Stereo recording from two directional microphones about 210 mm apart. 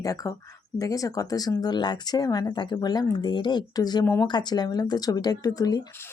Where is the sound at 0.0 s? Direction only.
15° left (ahead or behind).